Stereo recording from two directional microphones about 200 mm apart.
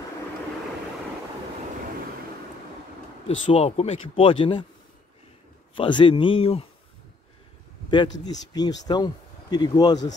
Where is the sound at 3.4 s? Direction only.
30° left (ahead or behind).